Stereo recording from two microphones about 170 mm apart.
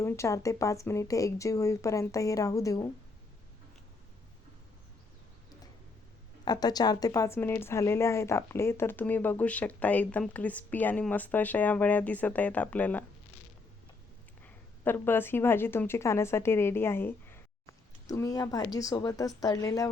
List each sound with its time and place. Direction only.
0.0 s speech: 15° left (ahead or behind)
6.4 s a woman's voice: 25° left (ahead or behind)
14.4 s a woman's voice: 10° left (ahead or behind)